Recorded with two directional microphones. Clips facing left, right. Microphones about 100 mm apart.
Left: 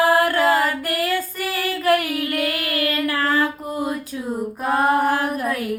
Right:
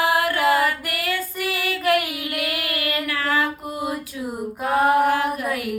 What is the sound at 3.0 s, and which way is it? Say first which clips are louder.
Music: left 2 dB; 35° left (ahead or behind).